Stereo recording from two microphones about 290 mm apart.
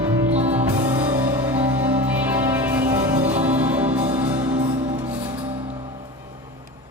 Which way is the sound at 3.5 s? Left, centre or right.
Centre.